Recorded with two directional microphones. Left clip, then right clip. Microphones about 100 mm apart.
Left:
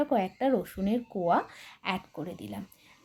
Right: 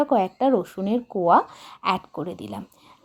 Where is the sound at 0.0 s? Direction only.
35° right (ahead or behind).